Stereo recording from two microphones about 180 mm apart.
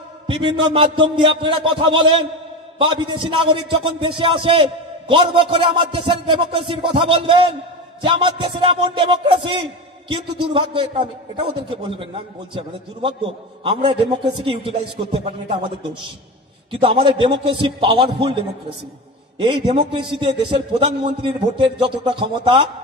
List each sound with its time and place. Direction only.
0.3 s a man's voice: 25° right (ahead or behind)
12.5 s a man's voice: 30° right (ahead or behind)